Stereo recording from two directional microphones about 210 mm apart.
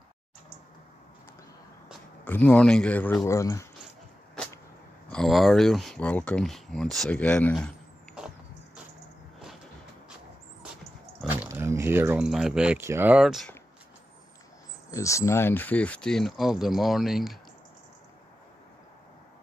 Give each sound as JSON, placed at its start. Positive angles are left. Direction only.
{"t": 2.2, "sound": "speech", "side_deg": 5}
{"t": 5.1, "sound": "speech", "side_deg": 0}
{"t": 11.2, "sound": "speech", "side_deg": -10}
{"t": 14.9, "sound": "speech", "side_deg": 15}